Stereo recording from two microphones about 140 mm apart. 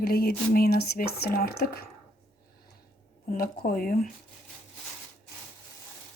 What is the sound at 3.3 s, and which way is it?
Speech, 90° left.